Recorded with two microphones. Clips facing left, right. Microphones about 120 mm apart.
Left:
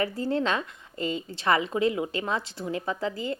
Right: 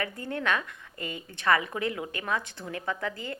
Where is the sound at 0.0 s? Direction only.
30° left (ahead or behind).